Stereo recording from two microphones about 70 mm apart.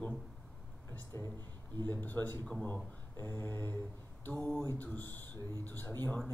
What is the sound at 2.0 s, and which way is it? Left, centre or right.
Speech, left.